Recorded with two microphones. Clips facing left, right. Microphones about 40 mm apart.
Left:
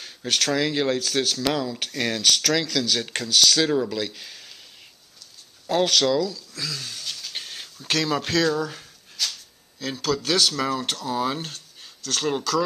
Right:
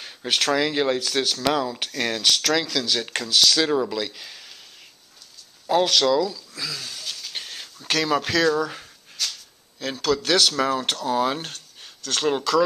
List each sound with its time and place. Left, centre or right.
0.0 s speech: centre
5.7 s speech: centre
6.2 s speech: centre
10.3 s speech: centre
11.0 s speech: right